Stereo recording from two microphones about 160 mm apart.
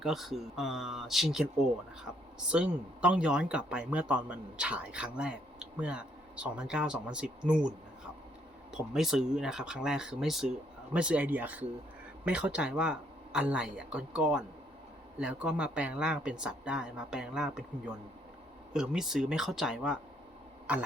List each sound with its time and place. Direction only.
0.0 s speech: centre (ahead or behind)
2.5 s speech: 5° right (ahead or behind)
8.7 s speech: 5° right (ahead or behind)